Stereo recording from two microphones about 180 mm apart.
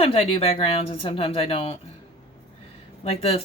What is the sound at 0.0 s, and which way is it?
Speech, 30° left (ahead or behind).